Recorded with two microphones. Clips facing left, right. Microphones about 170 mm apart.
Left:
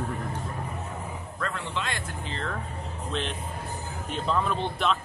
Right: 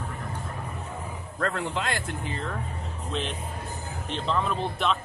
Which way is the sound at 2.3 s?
5° right (ahead or behind).